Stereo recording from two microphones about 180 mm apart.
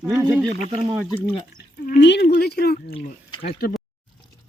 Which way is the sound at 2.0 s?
70° left (ahead or behind).